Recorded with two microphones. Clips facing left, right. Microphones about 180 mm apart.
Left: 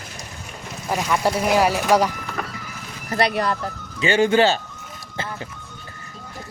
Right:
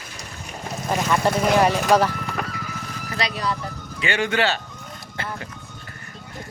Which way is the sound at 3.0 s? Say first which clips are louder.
Left 6 dB; 55° left (ahead or behind).